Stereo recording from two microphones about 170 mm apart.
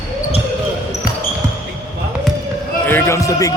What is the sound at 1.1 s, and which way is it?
Basketball bounce, 75° left (ahead or behind).